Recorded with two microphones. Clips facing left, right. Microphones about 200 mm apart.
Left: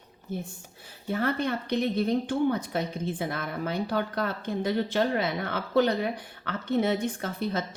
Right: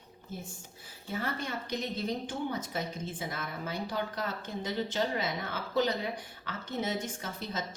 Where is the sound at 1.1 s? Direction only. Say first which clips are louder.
Left 8 dB; 60° left (ahead or behind).